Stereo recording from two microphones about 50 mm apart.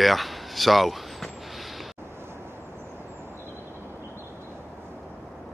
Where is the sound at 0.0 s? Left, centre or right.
Centre.